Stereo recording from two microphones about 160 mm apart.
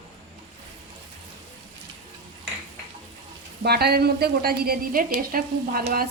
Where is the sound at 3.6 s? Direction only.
85° right; by 6.0 s 70° right (ahead or behind).